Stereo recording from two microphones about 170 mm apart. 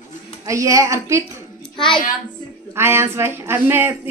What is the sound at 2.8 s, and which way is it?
Speech, 15° right (ahead or behind).